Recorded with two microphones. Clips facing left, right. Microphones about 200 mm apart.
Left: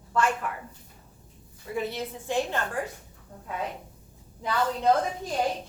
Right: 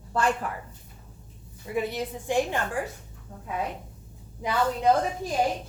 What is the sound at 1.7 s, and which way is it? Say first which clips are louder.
Speech: right 2 dB; 15° right (ahead or behind).